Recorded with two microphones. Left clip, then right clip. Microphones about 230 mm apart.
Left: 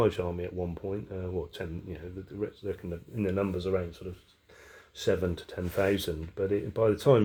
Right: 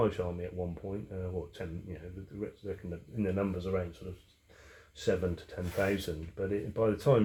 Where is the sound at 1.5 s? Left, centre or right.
Left.